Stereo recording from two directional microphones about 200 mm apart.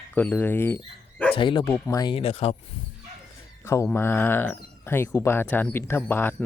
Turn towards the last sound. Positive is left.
turn(degrees=10)  # may be behind; listen again after turning